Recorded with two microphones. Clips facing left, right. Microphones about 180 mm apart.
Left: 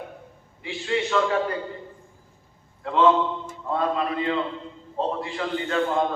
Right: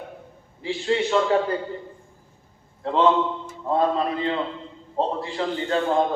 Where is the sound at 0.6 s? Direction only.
30° right (ahead or behind).